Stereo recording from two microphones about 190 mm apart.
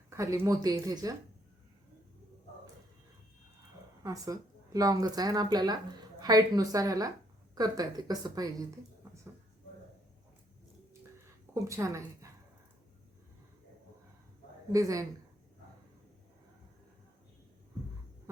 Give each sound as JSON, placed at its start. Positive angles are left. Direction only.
{"t": 0.1, "sound": "speech", "side_deg": -15}
{"t": 4.0, "sound": "a woman's voice", "side_deg": -20}
{"t": 11.5, "sound": "a woman's voice", "side_deg": -15}
{"t": 14.7, "sound": "speech", "side_deg": -15}